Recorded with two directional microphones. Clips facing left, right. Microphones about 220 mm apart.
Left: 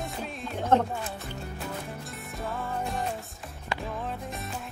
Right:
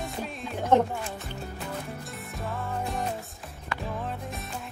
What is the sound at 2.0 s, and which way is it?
Music, centre (ahead or behind).